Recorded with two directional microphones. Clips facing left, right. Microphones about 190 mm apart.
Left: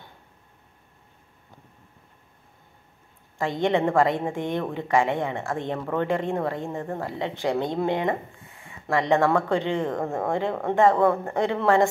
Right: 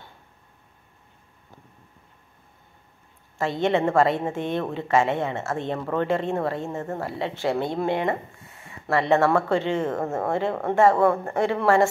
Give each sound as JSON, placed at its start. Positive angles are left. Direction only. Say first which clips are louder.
{"t": 3.3, "sound": "a woman's voice", "louder": "right 1 dB", "side_deg": 15}